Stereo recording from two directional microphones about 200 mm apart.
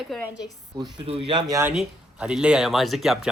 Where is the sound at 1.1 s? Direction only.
25° right (ahead or behind).